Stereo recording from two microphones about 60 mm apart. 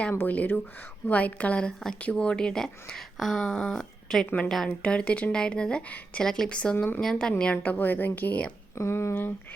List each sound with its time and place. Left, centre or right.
0.1 s a woman's voice: left; by 6.7 s centre
6.7 s a woman's voice: left
7.0 s speech: centre
7.5 s a woman's voice: left
8.8 s speech: left